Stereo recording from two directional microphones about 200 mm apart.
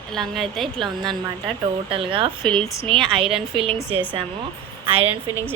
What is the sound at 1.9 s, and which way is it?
Speech, 25° right (ahead or behind).